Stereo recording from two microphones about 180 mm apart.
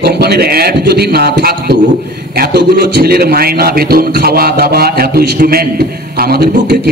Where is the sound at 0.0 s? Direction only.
60° right (ahead or behind).